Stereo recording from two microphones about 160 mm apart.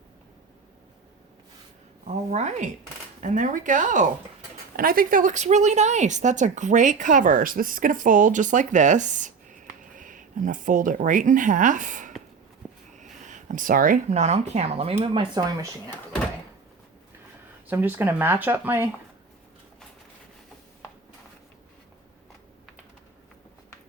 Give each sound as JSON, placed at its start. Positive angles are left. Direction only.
{"t": 2.0, "sound": "speech", "side_deg": -45}
{"t": 4.8, "sound": "speech", "side_deg": -65}
{"t": 12.6, "sound": "a sound", "side_deg": -10}
{"t": 13.0, "sound": "a sound", "side_deg": -50}
{"t": 14.1, "sound": "speech", "side_deg": -45}
{"t": 17.7, "sound": "speech", "side_deg": -10}